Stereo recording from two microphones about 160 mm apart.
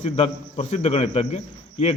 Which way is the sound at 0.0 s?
40° left (ahead or behind).